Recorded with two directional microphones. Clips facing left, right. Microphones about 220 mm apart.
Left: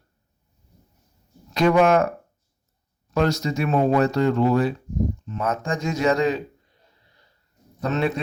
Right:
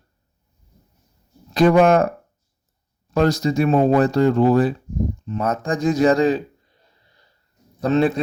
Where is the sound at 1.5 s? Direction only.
35° right (ahead or behind).